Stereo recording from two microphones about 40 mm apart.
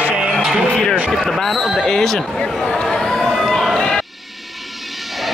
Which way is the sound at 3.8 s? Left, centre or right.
Centre.